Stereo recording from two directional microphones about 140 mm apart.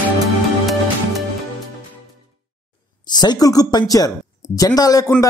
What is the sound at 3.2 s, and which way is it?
A man's voice, 30° left (ahead or behind).